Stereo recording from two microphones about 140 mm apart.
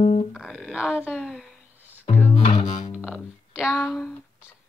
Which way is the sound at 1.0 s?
5° right (ahead or behind).